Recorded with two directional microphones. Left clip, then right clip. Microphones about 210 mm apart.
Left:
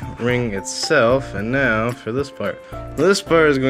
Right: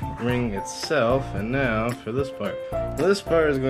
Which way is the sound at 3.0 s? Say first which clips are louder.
Left 6 dB; 50° left (ahead or behind).